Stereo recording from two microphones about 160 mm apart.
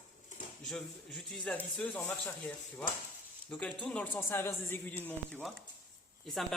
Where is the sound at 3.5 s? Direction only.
5° left (ahead or behind).